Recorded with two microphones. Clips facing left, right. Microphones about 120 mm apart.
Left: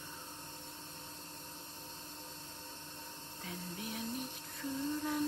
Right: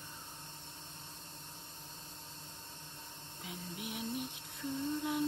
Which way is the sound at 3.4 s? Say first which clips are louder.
Even; 15° right (ahead or behind).